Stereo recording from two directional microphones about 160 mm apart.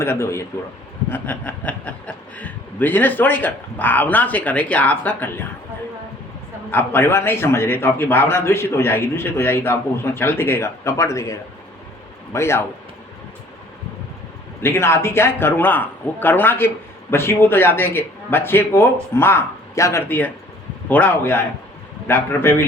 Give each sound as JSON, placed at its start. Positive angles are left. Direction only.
{"t": 0.0, "sound": "a man's voice", "side_deg": 15}
{"t": 6.7, "sound": "a man's voice", "side_deg": 10}
{"t": 14.6, "sound": "a man's voice", "side_deg": 15}